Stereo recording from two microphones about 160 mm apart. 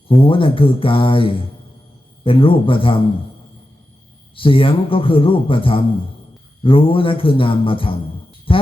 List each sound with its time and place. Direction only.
0.1 s a man's voice: 35° left (ahead or behind)
4.4 s a man's voice: 35° left (ahead or behind)